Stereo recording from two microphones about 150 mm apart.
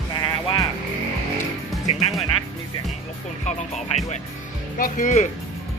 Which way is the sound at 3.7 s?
50° left (ahead or behind).